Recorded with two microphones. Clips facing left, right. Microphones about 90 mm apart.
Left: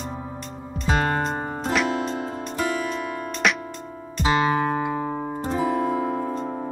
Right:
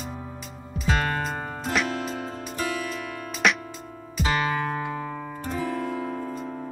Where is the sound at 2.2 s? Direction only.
35° left (ahead or behind).